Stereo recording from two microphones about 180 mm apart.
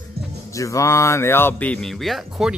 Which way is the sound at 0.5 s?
15° left (ahead or behind).